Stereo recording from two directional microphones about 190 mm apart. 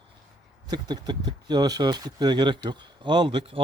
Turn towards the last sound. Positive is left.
turn(degrees=-25)  # may be behind; listen again after turning